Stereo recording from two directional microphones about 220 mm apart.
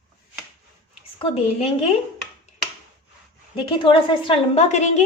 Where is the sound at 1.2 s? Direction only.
25° left (ahead or behind).